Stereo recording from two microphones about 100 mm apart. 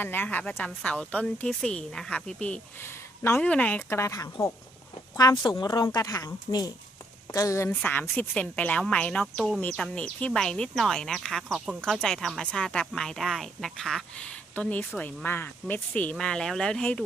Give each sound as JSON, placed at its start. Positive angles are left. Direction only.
{"t": 0.0, "sound": "speech", "side_deg": 20}
{"t": 2.8, "sound": "a sound", "side_deg": 25}
{"t": 3.4, "sound": "a woman's voice", "side_deg": 15}
{"t": 11.8, "sound": "speech", "side_deg": 5}
{"t": 14.5, "sound": "speech", "side_deg": 15}